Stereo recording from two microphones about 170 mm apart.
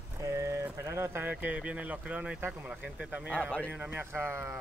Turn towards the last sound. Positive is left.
turn(degrees=-15)  # may be behind; listen again after turning